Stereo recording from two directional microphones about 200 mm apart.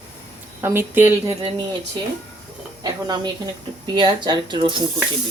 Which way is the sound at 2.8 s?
20° right (ahead or behind).